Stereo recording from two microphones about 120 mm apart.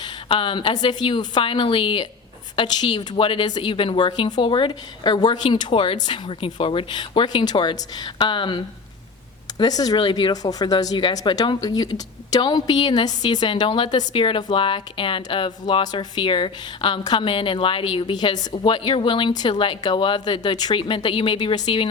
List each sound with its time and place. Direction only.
0.0 s a woman's voice: 45° left (ahead or behind)